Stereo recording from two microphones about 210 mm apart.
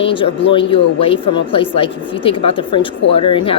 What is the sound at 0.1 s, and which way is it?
A woman's voice, 25° left (ahead or behind).